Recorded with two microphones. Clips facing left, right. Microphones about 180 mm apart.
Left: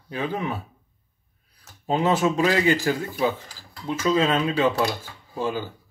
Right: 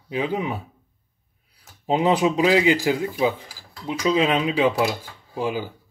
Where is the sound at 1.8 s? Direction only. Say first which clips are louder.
Right 2 dB; 15° right (ahead or behind).